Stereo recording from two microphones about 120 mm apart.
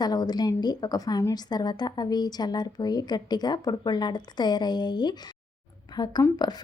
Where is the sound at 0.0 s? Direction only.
35° left (ahead or behind).